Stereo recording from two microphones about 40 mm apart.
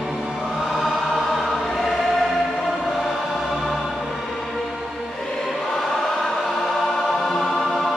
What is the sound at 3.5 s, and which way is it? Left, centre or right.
Choir, centre.